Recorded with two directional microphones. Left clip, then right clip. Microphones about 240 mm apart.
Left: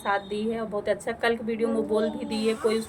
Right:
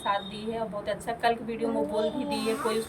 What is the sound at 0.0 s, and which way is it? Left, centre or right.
A woman's voice, centre.